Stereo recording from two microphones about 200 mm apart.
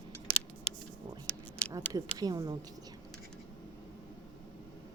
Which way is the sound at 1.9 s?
20° right (ahead or behind).